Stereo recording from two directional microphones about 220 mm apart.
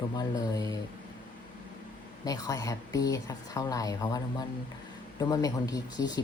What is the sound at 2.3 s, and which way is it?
Speech, 15° left (ahead or behind).